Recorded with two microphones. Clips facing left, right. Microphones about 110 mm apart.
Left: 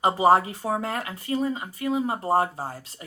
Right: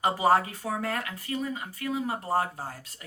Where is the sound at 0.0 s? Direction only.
25° left (ahead or behind).